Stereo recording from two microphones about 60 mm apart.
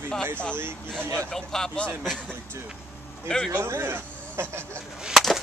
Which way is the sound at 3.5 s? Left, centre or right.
Right.